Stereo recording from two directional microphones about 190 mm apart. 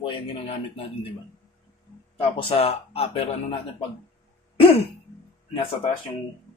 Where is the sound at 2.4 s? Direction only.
30° left (ahead or behind).